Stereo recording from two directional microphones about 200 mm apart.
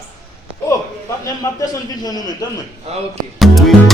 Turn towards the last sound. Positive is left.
turn(degrees=0)  # may be behind; listen again after turning